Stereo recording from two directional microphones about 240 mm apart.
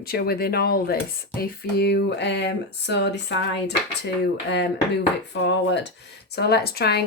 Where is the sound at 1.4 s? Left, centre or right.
Left.